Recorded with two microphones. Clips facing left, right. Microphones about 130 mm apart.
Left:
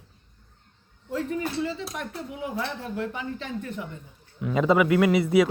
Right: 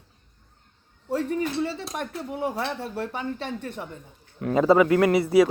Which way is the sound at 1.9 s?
45° right (ahead or behind).